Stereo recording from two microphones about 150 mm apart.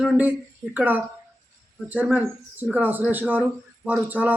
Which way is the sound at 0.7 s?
10° right (ahead or behind).